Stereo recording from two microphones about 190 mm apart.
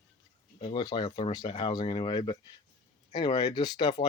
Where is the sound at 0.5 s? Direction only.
25° left (ahead or behind).